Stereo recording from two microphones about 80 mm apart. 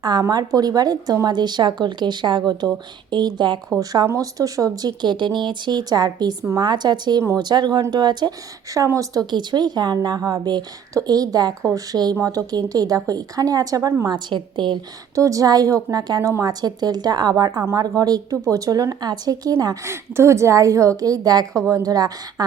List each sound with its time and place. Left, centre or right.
0.0 s speech: right
4.0 s speech: right
8.8 s a woman's voice: right
9.3 s speech: right
14.1 s a woman's voice: right
15.1 s speech: right
19.8 s a woman's voice: right